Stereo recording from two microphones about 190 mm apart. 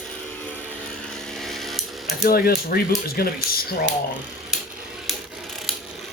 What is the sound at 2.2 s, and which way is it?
Speech, 55° left (ahead or behind).